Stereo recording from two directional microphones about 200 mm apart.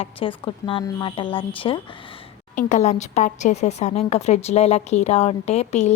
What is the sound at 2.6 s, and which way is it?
A woman's voice, 40° left (ahead or behind).